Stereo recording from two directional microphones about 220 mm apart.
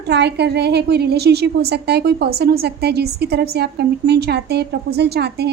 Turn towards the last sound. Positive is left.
turn(degrees=-50)  # may be behind; listen again after turning